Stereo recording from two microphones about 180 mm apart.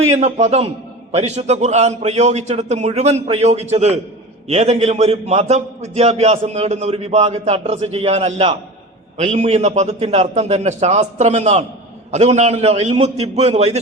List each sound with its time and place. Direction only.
0.1 s a man's voice: 40° right (ahead or behind)